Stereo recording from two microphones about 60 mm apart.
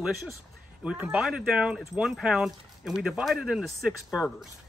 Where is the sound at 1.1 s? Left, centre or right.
Centre.